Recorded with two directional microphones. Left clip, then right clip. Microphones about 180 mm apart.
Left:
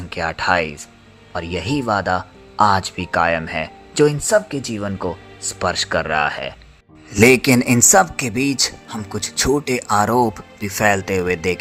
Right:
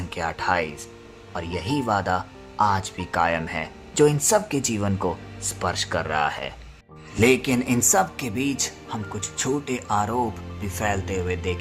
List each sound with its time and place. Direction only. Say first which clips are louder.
0.1 s speech: left 6 dB; 15° left (ahead or behind)
2.6 s speech: left 6 dB; 25° left (ahead or behind)
7.2 s speech: left 7 dB; 40° left (ahead or behind)